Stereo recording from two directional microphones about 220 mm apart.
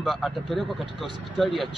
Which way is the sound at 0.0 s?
Centre (ahead or behind).